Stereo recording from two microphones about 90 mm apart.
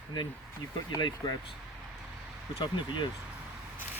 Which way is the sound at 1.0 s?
50° left (ahead or behind).